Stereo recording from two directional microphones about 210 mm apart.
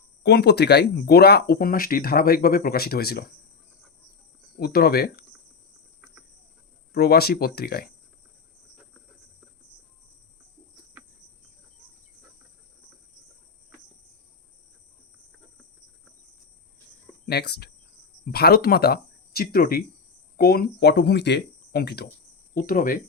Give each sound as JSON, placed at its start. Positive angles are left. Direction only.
{"t": 0.2, "sound": "speech", "side_deg": 55}
{"t": 4.6, "sound": "speech", "side_deg": 45}
{"t": 6.9, "sound": "speech", "side_deg": 50}
{"t": 17.2, "sound": "speech", "side_deg": 50}